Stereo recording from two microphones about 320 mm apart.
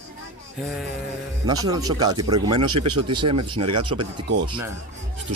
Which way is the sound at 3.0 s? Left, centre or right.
Centre.